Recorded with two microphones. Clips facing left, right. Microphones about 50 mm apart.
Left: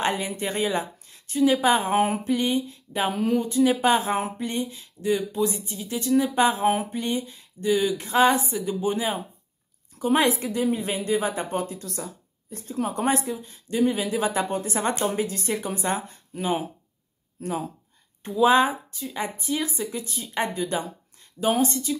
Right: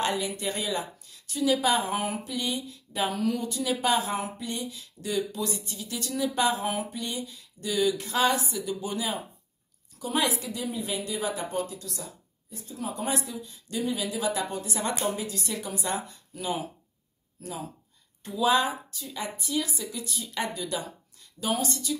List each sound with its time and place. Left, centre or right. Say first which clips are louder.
0.0 s a woman's voice: left 2 dB; left